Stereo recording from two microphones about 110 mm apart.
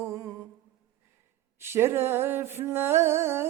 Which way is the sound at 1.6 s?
20° right (ahead or behind).